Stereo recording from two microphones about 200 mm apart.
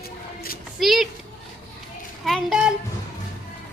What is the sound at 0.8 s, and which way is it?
Speech, centre (ahead or behind).